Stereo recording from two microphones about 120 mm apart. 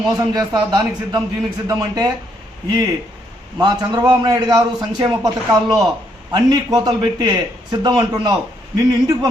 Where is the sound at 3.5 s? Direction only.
35° right (ahead or behind).